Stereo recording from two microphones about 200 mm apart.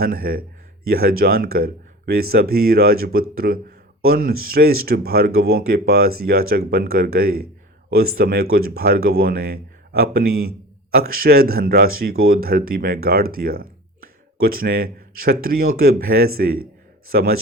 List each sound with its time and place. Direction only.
0.0 s speech: 45° right (ahead or behind)